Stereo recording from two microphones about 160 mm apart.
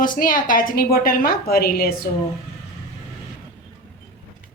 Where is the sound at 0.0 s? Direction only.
60° left (ahead or behind).